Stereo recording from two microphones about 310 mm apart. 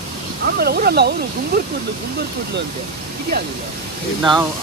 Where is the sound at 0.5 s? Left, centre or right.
Right.